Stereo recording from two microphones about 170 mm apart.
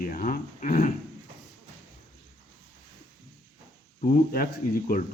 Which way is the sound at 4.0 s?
55° left (ahead or behind).